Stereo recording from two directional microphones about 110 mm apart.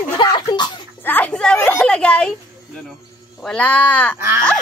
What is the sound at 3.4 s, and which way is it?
Speech, 10° left (ahead or behind).